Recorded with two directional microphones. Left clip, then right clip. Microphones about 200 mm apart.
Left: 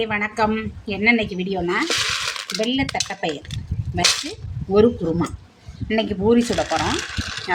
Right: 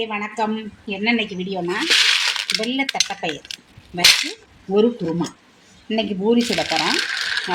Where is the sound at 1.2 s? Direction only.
25° left (ahead or behind).